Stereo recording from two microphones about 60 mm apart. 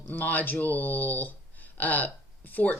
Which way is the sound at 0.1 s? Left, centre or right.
Left.